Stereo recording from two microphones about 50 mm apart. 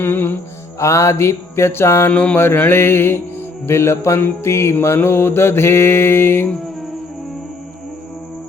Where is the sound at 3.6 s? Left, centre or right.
Left.